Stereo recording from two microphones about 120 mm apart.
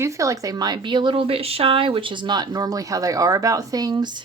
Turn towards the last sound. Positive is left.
turn(degrees=-40)  # may be behind; listen again after turning